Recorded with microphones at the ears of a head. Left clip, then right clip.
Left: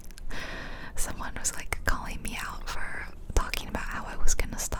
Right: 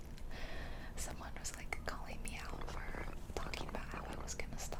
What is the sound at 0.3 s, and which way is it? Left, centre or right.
Whispering, left.